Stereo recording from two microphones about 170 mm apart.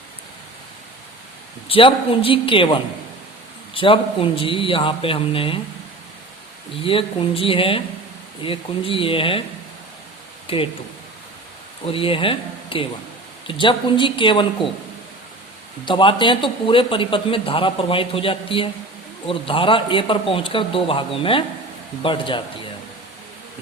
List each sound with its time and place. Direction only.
1.6 s a man's voice: 35° left (ahead or behind)
6.8 s a man's voice: 30° left (ahead or behind)
10.4 s speech: 30° left (ahead or behind)
11.9 s a man's voice: 30° left (ahead or behind)
15.9 s a man's voice: 30° left (ahead or behind)